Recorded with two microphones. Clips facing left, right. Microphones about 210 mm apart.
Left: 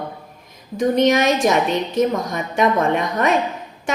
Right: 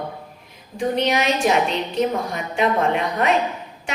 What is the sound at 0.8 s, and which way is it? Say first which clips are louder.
A woman's voice: left 5 dB; 45° left (ahead or behind).